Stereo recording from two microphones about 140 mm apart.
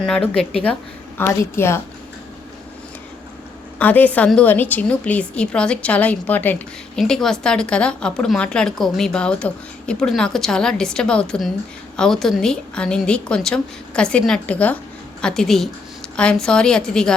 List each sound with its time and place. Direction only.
0.0 s a woman's voice: 5° left (ahead or behind)
1.2 s a woman's voice: 15° left (ahead or behind)
3.8 s a woman's voice: 10° left (ahead or behind)